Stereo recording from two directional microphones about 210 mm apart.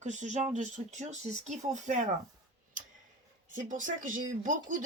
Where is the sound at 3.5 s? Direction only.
40° right (ahead or behind).